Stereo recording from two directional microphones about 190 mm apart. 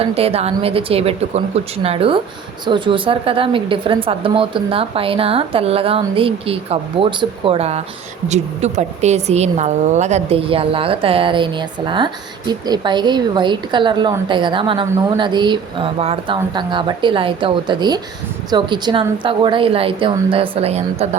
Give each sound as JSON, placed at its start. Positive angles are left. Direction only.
{"t": 0.0, "sound": "a woman's voice", "side_deg": -30}